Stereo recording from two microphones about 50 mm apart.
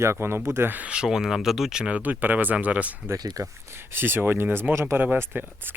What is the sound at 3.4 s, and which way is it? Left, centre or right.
Speech, right.